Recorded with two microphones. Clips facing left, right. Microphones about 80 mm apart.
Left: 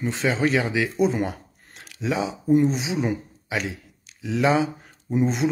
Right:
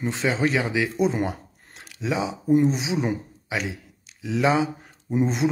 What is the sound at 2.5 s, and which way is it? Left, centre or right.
Speech, centre.